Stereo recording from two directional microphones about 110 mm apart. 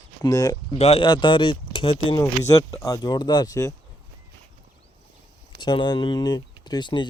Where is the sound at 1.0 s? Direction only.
45° left (ahead or behind).